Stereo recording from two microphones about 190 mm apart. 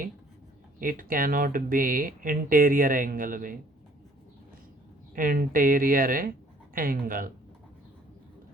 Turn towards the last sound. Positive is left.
turn(degrees=-50)  # may be behind; listen again after turning